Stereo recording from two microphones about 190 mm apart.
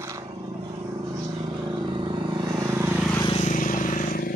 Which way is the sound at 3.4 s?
45° left (ahead or behind).